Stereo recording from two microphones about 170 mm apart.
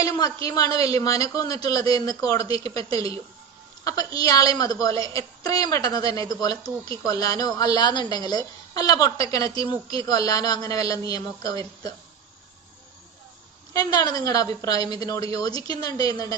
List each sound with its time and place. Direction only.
0.0 s a sound: 20° left (ahead or behind)
0.4 s a woman's voice: 20° left (ahead or behind)
13.7 s a woman's voice: 20° left (ahead or behind)